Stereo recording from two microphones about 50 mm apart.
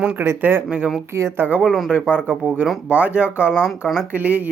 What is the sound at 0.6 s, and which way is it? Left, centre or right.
Speech, right.